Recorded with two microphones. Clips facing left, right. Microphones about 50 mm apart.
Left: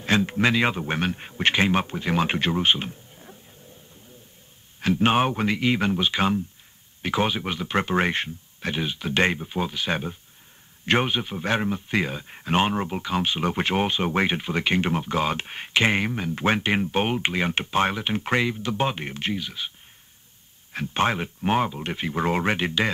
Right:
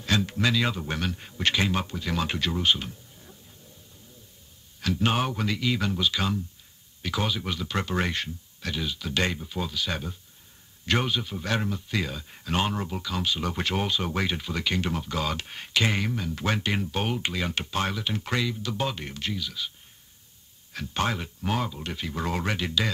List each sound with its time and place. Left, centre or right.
0.0 s speech: left
4.7 s speech: left
20.7 s speech: left